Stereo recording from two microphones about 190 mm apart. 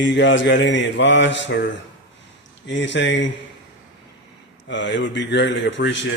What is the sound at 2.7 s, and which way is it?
Mantra, 70° left (ahead or behind).